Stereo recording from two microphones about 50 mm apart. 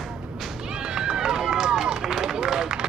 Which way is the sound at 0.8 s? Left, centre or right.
Centre.